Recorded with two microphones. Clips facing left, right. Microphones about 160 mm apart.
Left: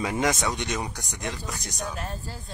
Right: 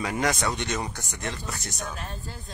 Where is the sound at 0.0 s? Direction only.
20° left (ahead or behind).